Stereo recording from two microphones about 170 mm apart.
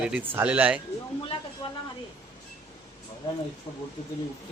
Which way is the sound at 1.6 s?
25° left (ahead or behind).